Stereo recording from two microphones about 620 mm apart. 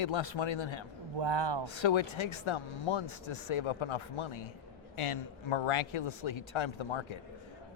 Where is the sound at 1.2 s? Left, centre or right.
Right.